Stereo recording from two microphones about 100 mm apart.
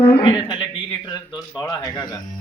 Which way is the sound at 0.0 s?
60° left (ahead or behind).